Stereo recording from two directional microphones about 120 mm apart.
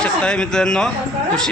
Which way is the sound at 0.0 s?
10° left (ahead or behind).